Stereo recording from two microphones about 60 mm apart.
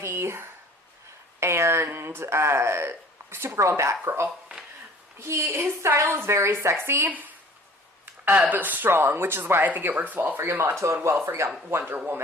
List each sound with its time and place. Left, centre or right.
0.0 s a sound: right
3.6 s a woman's voice: right
7.1 s a woman's voice: right
9.6 s speech: right
10.3 s a woman's voice: right
11.1 s speech: right